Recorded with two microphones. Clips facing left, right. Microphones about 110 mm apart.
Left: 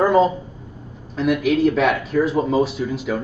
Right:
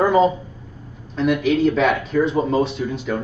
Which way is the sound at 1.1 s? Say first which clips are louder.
Even; 5° left (ahead or behind).